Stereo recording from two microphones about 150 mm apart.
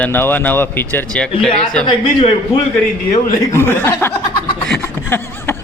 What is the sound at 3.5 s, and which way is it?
Speech, 15° left (ahead or behind).